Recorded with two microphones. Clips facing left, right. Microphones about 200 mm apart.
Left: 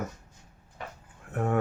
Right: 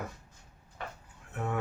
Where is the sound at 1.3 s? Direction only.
55° left (ahead or behind).